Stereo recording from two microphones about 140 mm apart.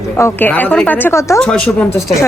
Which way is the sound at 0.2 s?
15° left (ahead or behind).